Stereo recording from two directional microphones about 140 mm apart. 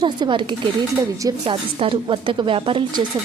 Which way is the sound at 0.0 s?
35° right (ahead or behind).